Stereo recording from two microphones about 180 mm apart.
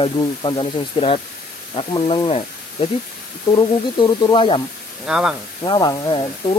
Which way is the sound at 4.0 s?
25° left (ahead or behind).